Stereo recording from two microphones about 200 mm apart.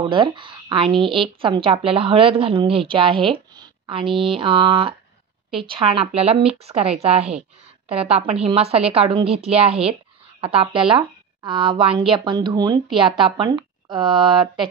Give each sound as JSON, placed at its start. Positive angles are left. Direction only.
{"t": 0.0, "sound": "a woman's voice", "side_deg": -25}